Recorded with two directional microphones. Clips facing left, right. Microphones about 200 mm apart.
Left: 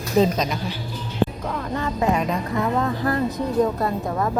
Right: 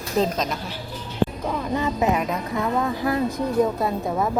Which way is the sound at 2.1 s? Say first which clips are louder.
Left 1 dB; 5° right (ahead or behind).